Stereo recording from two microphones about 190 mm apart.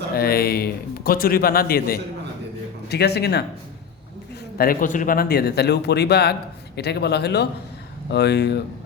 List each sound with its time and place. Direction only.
0.2 s a man's voice: 55° left (ahead or behind)
4.5 s speech: 50° left (ahead or behind)